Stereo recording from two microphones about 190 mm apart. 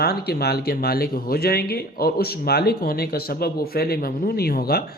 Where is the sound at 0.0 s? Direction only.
55° left (ahead or behind).